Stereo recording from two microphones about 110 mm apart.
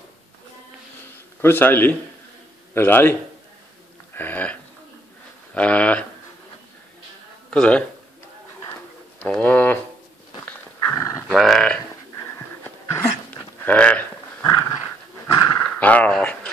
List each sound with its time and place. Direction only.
1.4 s a man's voice: 20° left (ahead or behind)
4.1 s a sound: 15° left (ahead or behind)
5.5 s speech: 10° left (ahead or behind)
7.5 s speech: 10° left (ahead or behind)
9.2 s speech: 10° left (ahead or behind)
10.4 s dog: 15° left (ahead or behind)
11.0 s dog: 25° left (ahead or behind)
11.2 s a sound: 5° left (ahead or behind)
12.2 s dog: 20° left (ahead or behind)
14.4 s dog: 30° left (ahead or behind)
15.3 s roaring cats: 30° left (ahead or behind)
15.8 s dog: 15° left (ahead or behind)